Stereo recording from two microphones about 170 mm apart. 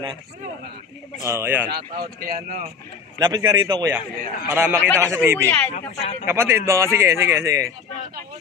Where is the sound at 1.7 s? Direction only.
60° right (ahead or behind).